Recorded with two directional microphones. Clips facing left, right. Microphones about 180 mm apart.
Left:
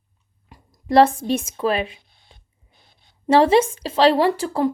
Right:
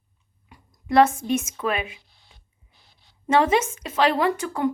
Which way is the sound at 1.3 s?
30° left (ahead or behind).